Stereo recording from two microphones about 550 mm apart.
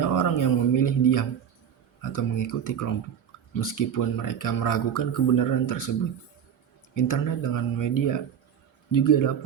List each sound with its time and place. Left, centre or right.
0.0 s a sound: left
2.0 s speech: left
6.9 s speech: left